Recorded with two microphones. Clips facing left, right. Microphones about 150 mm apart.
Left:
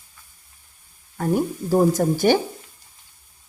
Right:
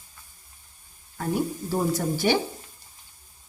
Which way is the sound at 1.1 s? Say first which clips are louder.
Left 5 dB; 45° left (ahead or behind).